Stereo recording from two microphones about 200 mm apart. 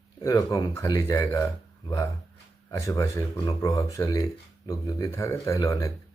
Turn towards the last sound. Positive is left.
turn(degrees=15)  # may be behind; listen again after turning